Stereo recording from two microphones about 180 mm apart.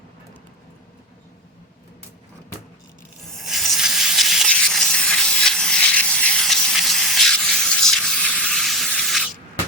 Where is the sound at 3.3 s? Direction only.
Centre (ahead or behind).